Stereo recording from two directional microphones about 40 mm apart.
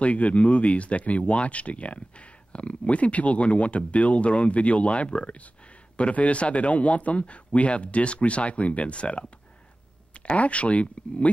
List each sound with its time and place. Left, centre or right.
0.0 s speech: left